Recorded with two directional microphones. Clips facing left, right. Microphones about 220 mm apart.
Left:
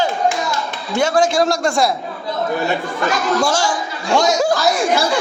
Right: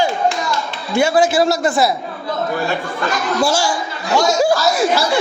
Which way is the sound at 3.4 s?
10° right (ahead or behind).